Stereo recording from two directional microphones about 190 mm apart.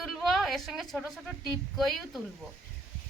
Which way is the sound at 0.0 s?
Centre (ahead or behind).